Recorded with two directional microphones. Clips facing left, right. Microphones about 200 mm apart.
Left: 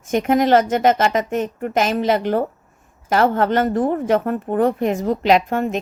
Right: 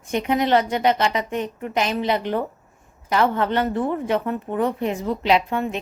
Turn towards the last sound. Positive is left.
turn(degrees=50)  # may be behind; listen again after turning